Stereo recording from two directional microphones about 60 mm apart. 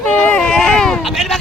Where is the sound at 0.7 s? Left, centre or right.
Centre.